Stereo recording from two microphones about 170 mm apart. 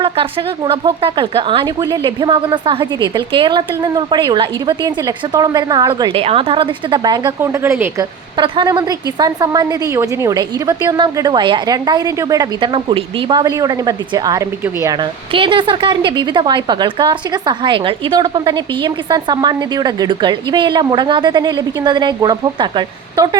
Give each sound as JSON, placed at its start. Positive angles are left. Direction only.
{"t": 0.0, "sound": "speech", "side_deg": -30}
{"t": 8.4, "sound": "speech", "side_deg": -25}
{"t": 14.9, "sound": "speech", "side_deg": -30}